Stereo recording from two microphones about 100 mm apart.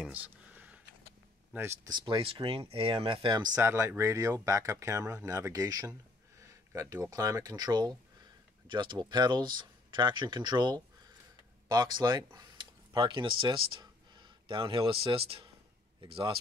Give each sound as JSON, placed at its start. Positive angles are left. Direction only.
{"t": 0.0, "sound": "a sound", "side_deg": -15}
{"t": 1.5, "sound": "speech", "side_deg": -25}
{"t": 1.9, "sound": "speech", "side_deg": -50}
{"t": 3.3, "sound": "speech", "side_deg": -45}
{"t": 3.6, "sound": "speech", "side_deg": -25}